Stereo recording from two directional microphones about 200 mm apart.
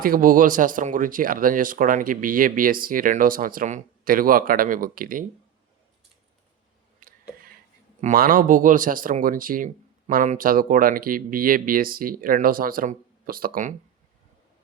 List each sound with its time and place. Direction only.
0.0 s speech: 45° right (ahead or behind)
7.0 s a sound: 45° right (ahead or behind)
8.0 s speech: 45° right (ahead or behind)